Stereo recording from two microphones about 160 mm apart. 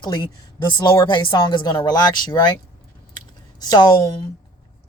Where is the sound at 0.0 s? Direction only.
30° left (ahead or behind).